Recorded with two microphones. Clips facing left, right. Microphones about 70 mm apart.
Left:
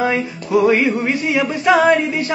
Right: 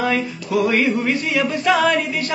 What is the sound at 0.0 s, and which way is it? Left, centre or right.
Music, left.